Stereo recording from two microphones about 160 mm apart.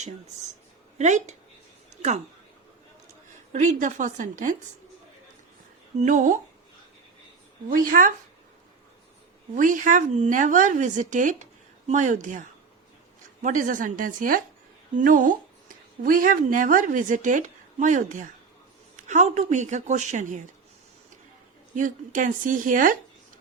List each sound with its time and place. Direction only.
0.9 s a woman's voice: 45° right (ahead or behind)
3.5 s a woman's voice: 50° right (ahead or behind)
6.0 s a woman's voice: 50° right (ahead or behind)
7.7 s speech: 60° right (ahead or behind)
9.6 s a woman's voice: 55° right (ahead or behind)
21.8 s speech: 55° right (ahead or behind)